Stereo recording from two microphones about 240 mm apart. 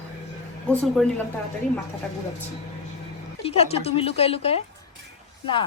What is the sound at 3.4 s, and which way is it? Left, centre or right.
Speech, left.